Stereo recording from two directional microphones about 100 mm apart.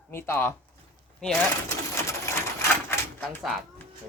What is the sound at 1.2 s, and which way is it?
Speech, 5° left (ahead or behind).